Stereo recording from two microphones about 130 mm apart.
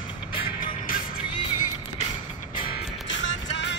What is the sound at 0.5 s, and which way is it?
Music, 90° left.